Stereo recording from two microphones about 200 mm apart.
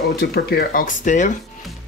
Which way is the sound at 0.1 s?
50° left (ahead or behind).